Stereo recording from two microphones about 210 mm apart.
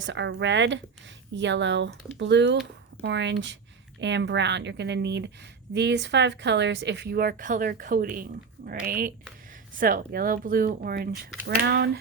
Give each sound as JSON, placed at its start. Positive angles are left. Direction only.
{"t": 0.0, "sound": "a woman's voice", "side_deg": -60}